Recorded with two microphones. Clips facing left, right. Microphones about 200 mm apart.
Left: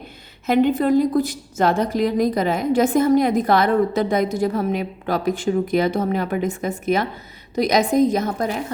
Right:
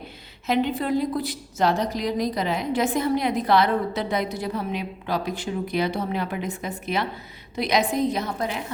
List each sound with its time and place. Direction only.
0.4 s a woman's voice: 50° left (ahead or behind)